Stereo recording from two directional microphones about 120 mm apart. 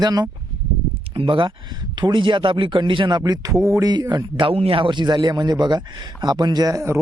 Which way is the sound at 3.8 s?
35° right (ahead or behind).